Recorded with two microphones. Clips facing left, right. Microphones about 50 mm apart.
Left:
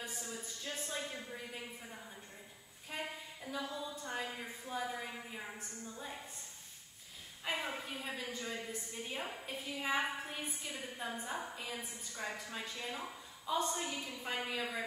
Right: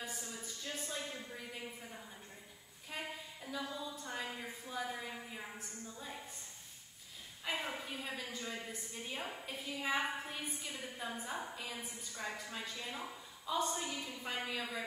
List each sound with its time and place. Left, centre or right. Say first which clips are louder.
0.2 s a sound: left 1 dB; centre
4.7 s a woman's voice: left 2 dB; centre
7.4 s a woman's voice: left 1 dB; centre